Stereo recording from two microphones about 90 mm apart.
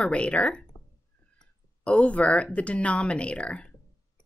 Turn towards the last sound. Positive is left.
turn(degrees=15)  # may be behind; listen again after turning